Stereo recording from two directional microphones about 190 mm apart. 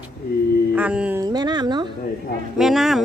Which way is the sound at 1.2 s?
20° right (ahead or behind).